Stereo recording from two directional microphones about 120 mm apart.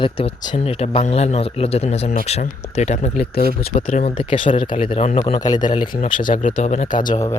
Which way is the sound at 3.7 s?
55° left (ahead or behind).